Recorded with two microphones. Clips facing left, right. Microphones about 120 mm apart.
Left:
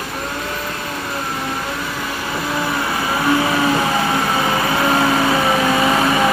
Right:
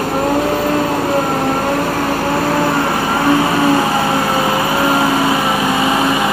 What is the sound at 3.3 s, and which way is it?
Vehicle, 30° right (ahead or behind).